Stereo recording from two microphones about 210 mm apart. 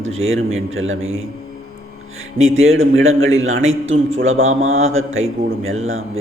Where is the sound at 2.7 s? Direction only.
70° right (ahead or behind).